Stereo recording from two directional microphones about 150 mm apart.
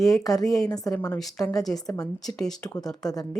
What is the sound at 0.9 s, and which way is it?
Speech, 10° left (ahead or behind).